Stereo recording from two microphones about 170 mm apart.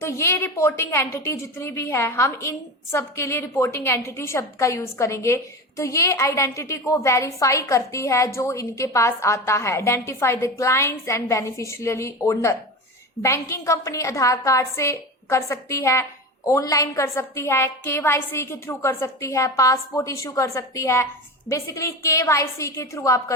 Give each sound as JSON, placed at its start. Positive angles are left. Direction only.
{"t": 0.0, "sound": "a woman's voice", "side_deg": 15}